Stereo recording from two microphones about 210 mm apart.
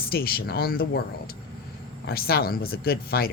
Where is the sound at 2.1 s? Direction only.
45° left (ahead or behind).